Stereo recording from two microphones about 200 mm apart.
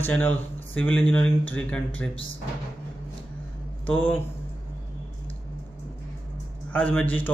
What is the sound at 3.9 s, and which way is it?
Speech, 10° left (ahead or behind).